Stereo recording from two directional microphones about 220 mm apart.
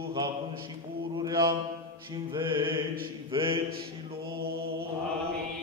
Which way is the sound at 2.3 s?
20° right (ahead or behind).